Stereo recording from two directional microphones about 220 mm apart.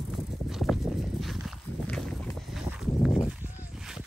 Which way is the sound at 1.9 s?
5° left (ahead or behind).